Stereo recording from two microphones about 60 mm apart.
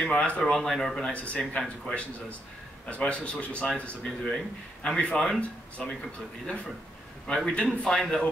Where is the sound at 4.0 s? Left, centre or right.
Centre.